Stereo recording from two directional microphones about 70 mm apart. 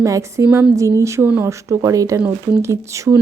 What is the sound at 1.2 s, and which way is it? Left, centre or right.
Speech, right.